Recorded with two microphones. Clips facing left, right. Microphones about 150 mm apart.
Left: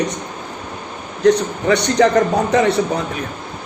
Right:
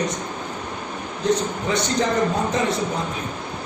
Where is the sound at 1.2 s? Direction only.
70° left (ahead or behind).